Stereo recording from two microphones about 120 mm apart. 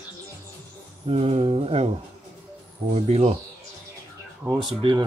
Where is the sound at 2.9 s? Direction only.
70° right (ahead or behind).